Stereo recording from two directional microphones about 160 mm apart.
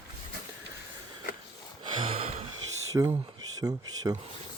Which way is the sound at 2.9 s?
25° right (ahead or behind).